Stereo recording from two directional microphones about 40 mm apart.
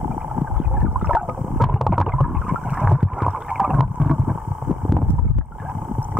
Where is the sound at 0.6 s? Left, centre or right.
Centre.